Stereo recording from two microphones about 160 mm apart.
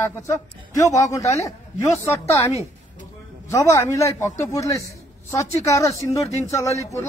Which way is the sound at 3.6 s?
20° left (ahead or behind).